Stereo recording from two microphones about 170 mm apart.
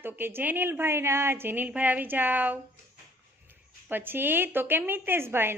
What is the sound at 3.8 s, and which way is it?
Speech, 10° right (ahead or behind).